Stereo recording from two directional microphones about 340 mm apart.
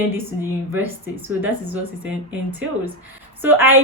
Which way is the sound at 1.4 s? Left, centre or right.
Centre.